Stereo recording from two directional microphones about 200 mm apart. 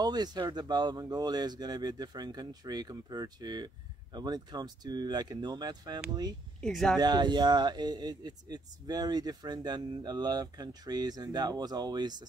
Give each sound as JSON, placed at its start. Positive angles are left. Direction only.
{"t": 0.0, "sound": "speech", "side_deg": -20}
{"t": 6.6, "sound": "speech", "side_deg": 0}
{"t": 7.0, "sound": "speech", "side_deg": -20}